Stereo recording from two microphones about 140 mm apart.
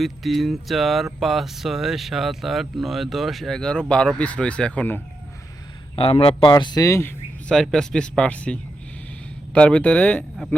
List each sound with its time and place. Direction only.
0.0 s speech: centre (ahead or behind)
6.0 s speech: 40° left (ahead or behind); by 7.1 s 20° left (ahead or behind)
7.4 s speech: 5° left (ahead or behind)
9.6 s speech: 10° left (ahead or behind)